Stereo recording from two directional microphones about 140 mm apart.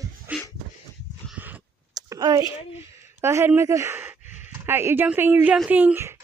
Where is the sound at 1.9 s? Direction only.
25° right (ahead or behind).